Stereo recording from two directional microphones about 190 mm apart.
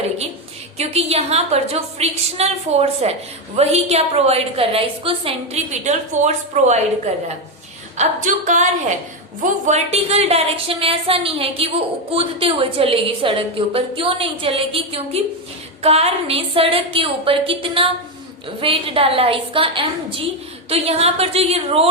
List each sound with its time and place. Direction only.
0.8 s a woman's voice: 35° right (ahead or behind)
7.9 s a woman's voice: 40° right (ahead or behind)